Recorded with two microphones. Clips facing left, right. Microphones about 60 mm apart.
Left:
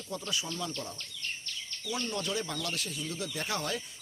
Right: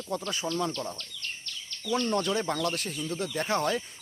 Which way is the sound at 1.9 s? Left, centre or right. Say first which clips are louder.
Right 7 dB; right.